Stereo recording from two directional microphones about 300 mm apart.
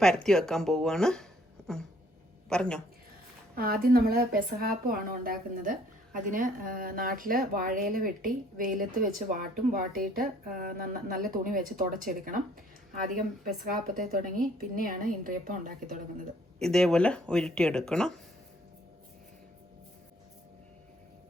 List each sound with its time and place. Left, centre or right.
0.0 s speech: centre
3.5 s speech: right
16.6 s speech: centre